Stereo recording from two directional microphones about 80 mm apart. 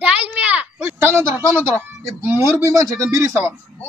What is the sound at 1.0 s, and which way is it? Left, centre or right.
Speech, right.